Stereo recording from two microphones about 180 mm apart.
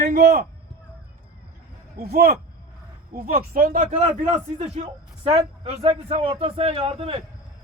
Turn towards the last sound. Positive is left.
turn(degrees=-30)  # may be behind; listen again after turning